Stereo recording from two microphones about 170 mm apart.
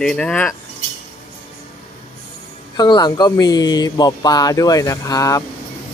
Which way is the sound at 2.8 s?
25° left (ahead or behind).